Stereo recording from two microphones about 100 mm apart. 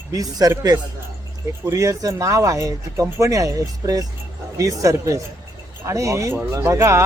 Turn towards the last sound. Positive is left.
turn(degrees=-25)  # may be behind; listen again after turning